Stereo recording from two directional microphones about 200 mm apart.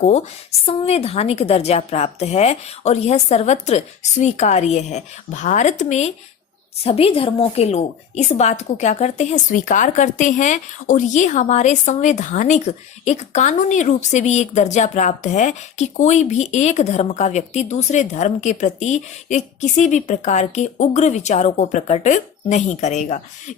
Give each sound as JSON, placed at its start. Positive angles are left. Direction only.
{"t": 0.0, "sound": "a woman's voice", "side_deg": 35}